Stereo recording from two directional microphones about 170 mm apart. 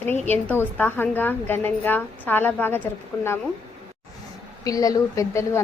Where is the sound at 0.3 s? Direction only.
10° left (ahead or behind).